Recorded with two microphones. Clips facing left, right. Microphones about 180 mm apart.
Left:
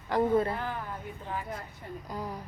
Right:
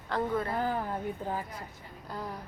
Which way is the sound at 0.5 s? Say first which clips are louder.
Right 5 dB; 40° right (ahead or behind).